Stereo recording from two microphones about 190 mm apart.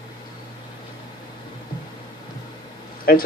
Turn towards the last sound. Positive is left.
turn(degrees=55)  # may be behind; listen again after turning